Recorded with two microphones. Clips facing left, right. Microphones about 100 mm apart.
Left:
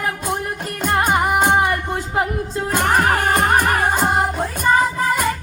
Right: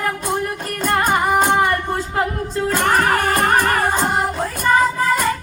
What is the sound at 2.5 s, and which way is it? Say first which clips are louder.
Music: right 1 dB; 20° left (ahead or behind).